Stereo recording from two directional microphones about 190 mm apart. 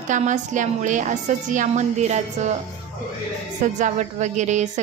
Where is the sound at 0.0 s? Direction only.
40° right (ahead or behind).